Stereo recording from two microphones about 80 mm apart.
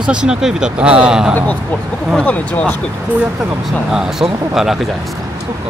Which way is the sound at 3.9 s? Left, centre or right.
Centre.